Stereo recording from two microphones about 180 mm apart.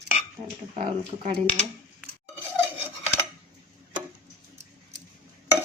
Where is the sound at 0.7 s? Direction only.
35° right (ahead or behind).